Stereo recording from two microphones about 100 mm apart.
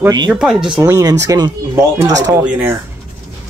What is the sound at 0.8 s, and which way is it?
Speech, 35° right (ahead or behind).